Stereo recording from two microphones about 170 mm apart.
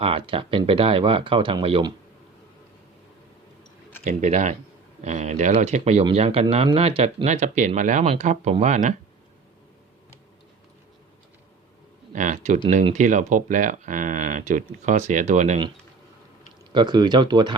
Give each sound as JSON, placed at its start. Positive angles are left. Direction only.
{"t": 0.0, "sound": "speech", "side_deg": -30}
{"t": 4.0, "sound": "speech", "side_deg": -45}
{"t": 12.1, "sound": "speech", "side_deg": -45}
{"t": 16.7, "sound": "speech", "side_deg": -25}